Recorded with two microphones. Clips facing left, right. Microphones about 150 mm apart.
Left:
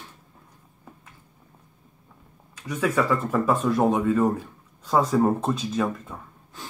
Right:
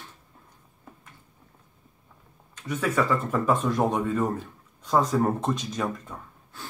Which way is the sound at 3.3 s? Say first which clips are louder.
Left 2 dB; 5° left (ahead or behind).